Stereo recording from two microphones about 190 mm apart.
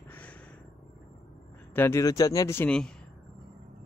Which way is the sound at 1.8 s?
15° left (ahead or behind).